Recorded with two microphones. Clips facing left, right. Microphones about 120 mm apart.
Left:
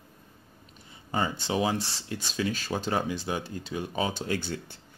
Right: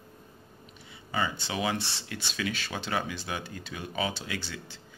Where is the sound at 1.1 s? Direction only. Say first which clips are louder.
Left 3 dB; 40° left (ahead or behind); by 4.8 s 55° left (ahead or behind).